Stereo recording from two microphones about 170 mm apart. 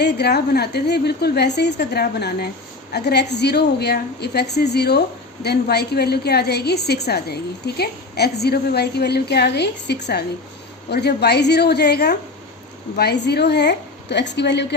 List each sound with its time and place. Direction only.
0.0 s a woman's voice: 75° left (ahead or behind); by 14.8 s 90° left